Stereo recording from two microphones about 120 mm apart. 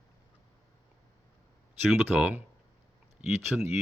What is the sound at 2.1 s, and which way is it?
Speech, 15° right (ahead or behind).